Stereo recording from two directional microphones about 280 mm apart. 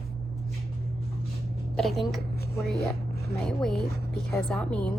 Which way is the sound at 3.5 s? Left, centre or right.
Centre.